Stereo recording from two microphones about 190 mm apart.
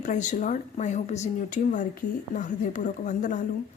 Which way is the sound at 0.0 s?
40° left (ahead or behind).